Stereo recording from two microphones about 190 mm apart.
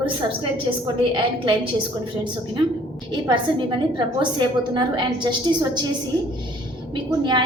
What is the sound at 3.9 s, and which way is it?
A woman's voice, 25° right (ahead or behind).